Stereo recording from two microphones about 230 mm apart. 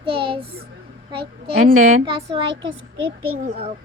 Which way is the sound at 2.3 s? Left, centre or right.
Right.